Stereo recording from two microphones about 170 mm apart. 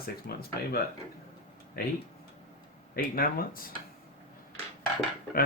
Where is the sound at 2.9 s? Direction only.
60° left (ahead or behind).